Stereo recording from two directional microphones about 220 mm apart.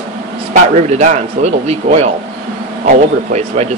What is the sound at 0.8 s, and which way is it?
Speech, 30° right (ahead or behind).